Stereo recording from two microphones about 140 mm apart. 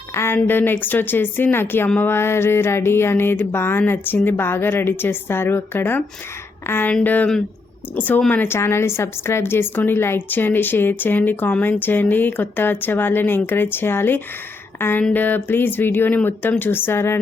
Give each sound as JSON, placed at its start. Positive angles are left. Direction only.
{"t": 0.1, "sound": "a woman's voice", "side_deg": 20}